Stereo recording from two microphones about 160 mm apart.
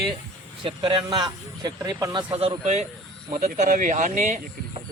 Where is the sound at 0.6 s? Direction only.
30° right (ahead or behind); by 4.4 s 50° right (ahead or behind).